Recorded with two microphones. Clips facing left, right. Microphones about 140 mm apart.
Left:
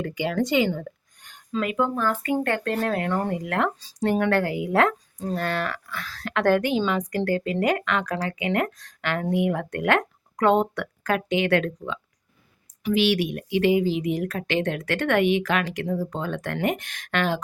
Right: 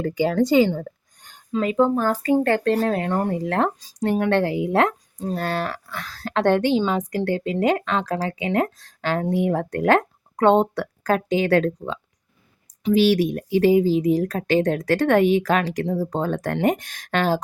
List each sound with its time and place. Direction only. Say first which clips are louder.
0.0 s speech: right 5 dB; 35° right (ahead or behind); by 3.2 s 20° right (ahead or behind)
3.4 s speech: right 3 dB; 30° right (ahead or behind)
5.4 s speech: right 2 dB; 35° right (ahead or behind)